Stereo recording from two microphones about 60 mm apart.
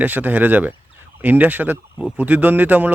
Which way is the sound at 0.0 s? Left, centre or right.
Right.